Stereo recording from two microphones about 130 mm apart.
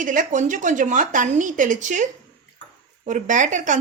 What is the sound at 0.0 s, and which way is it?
Speech, 90° right.